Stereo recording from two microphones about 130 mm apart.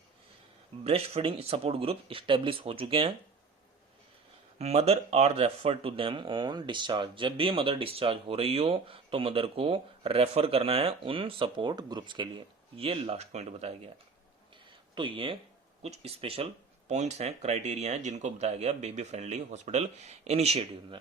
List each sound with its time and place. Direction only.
0.9 s speech: 50° right (ahead or behind)
4.5 s speech: 55° right (ahead or behind); by 12.3 s 35° right (ahead or behind)
12.7 s speech: 50° right (ahead or behind)
14.9 s speech: 40° right (ahead or behind)
15.8 s speech: 55° right (ahead or behind)
16.9 s speech: 60° right (ahead or behind)